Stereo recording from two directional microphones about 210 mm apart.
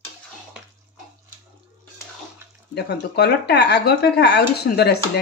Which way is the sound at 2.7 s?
50° left (ahead or behind).